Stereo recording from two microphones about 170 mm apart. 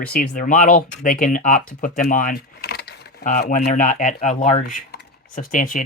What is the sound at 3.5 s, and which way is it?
Speech, 50° left (ahead or behind).